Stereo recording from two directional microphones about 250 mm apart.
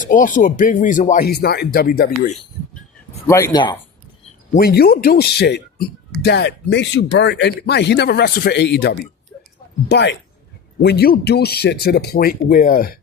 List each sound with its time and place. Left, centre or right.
0.0 s speech: left
3.2 s speech: centre
4.5 s speech: left